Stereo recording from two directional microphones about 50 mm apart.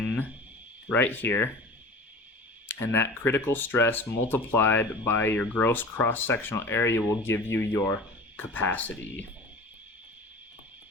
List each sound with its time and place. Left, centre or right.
0.9 s speech: left
2.6 s speech: left
5.6 s speech: left